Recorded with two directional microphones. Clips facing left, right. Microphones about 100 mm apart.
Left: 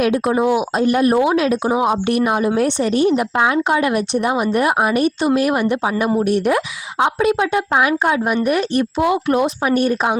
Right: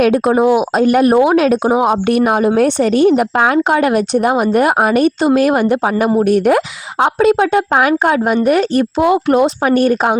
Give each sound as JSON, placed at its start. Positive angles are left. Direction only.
{"t": 0.3, "sound": "speech", "side_deg": -45}
{"t": 2.8, "sound": "a woman's voice", "side_deg": -65}
{"t": 9.1, "sound": "speech", "side_deg": -30}
{"t": 9.6, "sound": "a woman's voice", "side_deg": -50}